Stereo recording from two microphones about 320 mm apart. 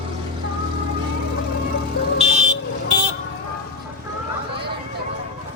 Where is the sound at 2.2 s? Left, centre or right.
Right.